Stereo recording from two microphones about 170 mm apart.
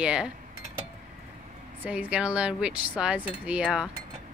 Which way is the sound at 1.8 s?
5° right (ahead or behind).